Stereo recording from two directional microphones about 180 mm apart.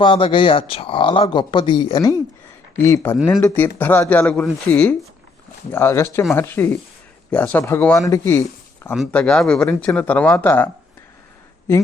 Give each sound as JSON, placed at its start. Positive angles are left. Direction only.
{"t": 0.0, "sound": "speech", "side_deg": 25}
{"t": 9.0, "sound": "speech", "side_deg": 5}